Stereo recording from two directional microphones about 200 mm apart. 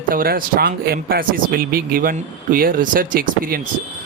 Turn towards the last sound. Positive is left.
turn(degrees=-45)  # may be behind; listen again after turning